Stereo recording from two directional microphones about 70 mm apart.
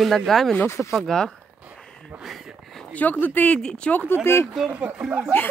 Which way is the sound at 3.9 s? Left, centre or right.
Left.